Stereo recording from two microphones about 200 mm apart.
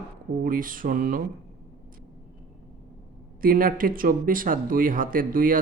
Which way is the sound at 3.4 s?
45° right (ahead or behind).